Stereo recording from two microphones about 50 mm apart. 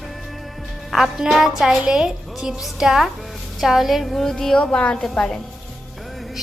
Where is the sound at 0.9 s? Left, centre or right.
Centre.